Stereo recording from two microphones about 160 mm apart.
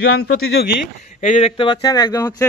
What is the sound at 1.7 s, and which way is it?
Speech, 25° left (ahead or behind).